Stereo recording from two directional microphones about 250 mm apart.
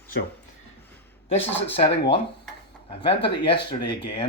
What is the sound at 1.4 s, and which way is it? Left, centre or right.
Speech, centre.